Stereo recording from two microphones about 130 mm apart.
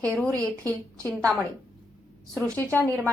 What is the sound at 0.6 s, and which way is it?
Speech, 25° right (ahead or behind).